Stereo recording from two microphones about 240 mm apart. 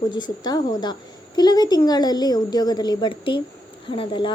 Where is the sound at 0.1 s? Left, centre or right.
Centre.